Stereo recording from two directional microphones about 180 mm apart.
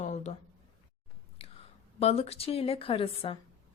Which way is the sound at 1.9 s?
35° left (ahead or behind).